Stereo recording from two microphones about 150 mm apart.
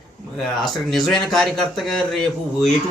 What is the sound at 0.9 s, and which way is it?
A man's voice, centre (ahead or behind).